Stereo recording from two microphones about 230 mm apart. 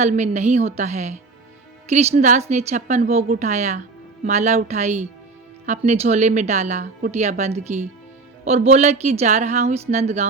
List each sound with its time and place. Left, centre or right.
0.0 s a woman's voice: right